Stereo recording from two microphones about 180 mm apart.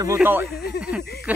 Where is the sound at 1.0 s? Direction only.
65° left (ahead or behind).